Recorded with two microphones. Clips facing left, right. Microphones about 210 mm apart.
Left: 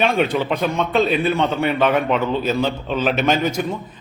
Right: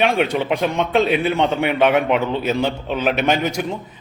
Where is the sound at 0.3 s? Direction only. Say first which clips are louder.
Right 1 dB; 15° right (ahead or behind).